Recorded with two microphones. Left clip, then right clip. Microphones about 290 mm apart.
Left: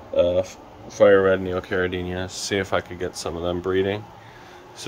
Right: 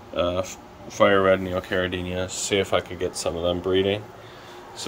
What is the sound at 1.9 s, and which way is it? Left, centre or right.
Speech, centre.